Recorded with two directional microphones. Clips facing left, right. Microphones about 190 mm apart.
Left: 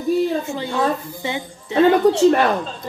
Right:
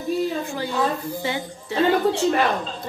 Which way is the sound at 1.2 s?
20° left (ahead or behind).